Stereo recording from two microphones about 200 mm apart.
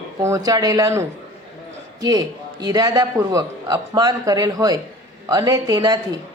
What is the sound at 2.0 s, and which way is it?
A man's voice, 20° right (ahead or behind).